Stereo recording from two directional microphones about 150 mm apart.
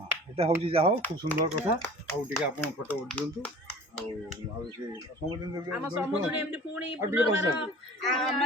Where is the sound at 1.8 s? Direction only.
15° left (ahead or behind).